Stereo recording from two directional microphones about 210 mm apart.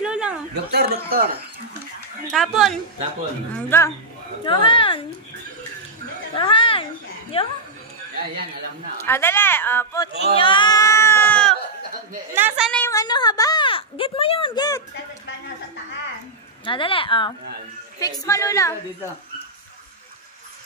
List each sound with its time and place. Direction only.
0.0 s a sound: 5° right (ahead or behind)
0.7 s speech: 50° right (ahead or behind)
2.3 s speech: centre (ahead or behind)
3.5 s speech: 10° left (ahead or behind)
4.5 s speech: 25° left (ahead or behind)
6.3 s a sound: 25° left (ahead or behind)
9.0 s speech: 10° left (ahead or behind)
10.2 s baby cry: 25° left (ahead or behind); by 11.5 s 5° left (ahead or behind)
12.4 s a woman's voice: 10° right (ahead or behind)
12.7 s speech: 10° left (ahead or behind)
16.6 s speech: 25° left (ahead or behind)